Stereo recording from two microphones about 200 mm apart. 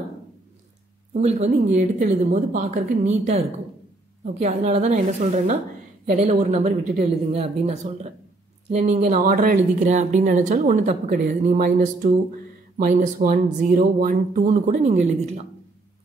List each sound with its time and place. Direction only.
1.1 s speech: 35° right (ahead or behind)